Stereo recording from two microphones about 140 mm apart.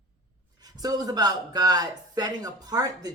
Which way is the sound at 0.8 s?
25° right (ahead or behind).